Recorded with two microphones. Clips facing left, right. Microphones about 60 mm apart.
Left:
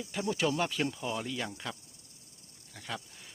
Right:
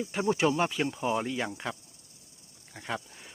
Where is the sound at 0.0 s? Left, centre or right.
Right.